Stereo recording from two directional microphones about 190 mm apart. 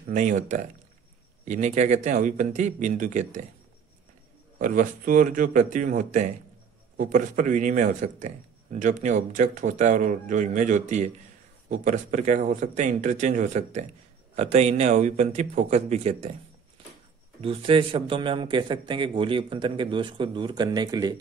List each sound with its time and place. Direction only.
0.1 s a man's voice: 40° right (ahead or behind)
4.6 s a man's voice: 45° right (ahead or behind)
17.4 s a man's voice: 30° right (ahead or behind)